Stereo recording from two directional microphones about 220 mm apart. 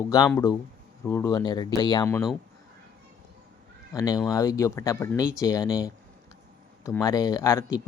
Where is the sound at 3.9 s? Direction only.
15° left (ahead or behind).